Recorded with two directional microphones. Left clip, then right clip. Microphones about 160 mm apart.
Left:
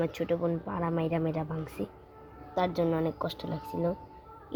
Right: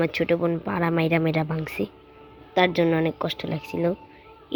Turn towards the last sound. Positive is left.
turn(degrees=-15)  # may be behind; listen again after turning